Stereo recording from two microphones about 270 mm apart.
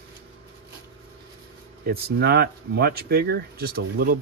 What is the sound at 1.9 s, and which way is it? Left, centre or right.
Speech, right.